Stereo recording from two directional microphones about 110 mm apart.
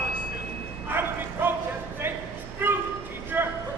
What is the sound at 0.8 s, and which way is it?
Bow-wow, 20° right (ahead or behind).